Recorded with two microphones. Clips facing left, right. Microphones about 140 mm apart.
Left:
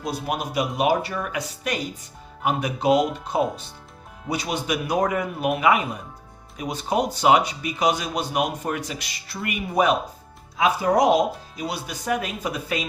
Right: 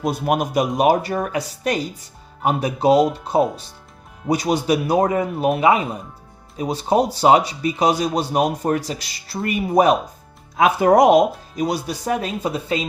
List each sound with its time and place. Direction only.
0.1 s speech: 50° right (ahead or behind); by 3.0 s 35° right (ahead or behind)
4.3 s speech: 40° right (ahead or behind)
10.6 s speech: 55° right (ahead or behind)
11.5 s speech: 45° right (ahead or behind); by 12.9 s 25° right (ahead or behind)